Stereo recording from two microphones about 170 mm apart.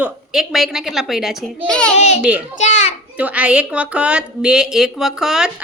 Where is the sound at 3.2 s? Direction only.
10° right (ahead or behind).